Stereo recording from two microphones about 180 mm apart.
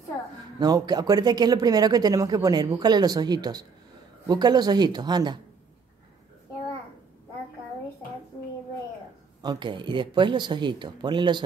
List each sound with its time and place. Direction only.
0.6 s speech: 20° right (ahead or behind)
9.4 s speech: 25° right (ahead or behind)